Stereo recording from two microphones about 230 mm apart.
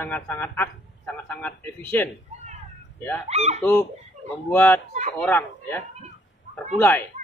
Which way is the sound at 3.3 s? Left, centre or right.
Right.